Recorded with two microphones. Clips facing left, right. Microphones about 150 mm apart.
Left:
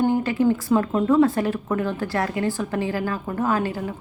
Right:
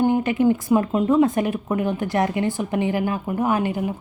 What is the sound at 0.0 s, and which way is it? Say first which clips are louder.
A woman's voice: right 1 dB; 20° right (ahead or behind).